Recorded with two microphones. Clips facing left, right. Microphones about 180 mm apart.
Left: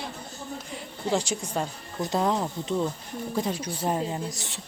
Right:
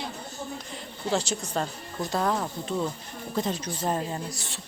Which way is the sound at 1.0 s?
10° left (ahead or behind).